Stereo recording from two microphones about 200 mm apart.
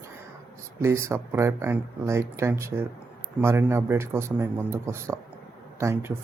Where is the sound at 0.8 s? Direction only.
15° right (ahead or behind).